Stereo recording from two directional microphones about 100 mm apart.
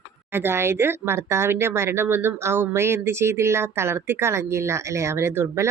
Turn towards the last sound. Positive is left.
turn(degrees=-25)  # may be behind; listen again after turning